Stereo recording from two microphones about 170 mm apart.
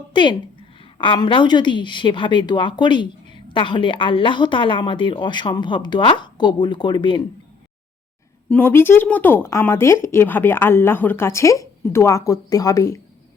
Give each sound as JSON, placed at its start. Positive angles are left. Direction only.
{"t": 0.1, "sound": "speech", "side_deg": 30}
{"t": 8.4, "sound": "speech", "side_deg": 10}